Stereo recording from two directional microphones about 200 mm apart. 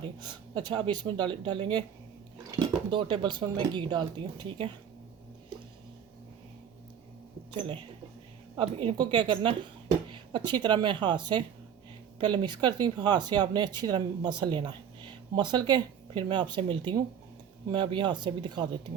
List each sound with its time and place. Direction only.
0.0 s speech: 20° right (ahead or behind)
7.5 s speech: 25° right (ahead or behind)